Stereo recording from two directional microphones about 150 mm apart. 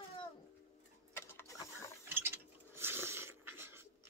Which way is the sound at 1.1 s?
20° left (ahead or behind).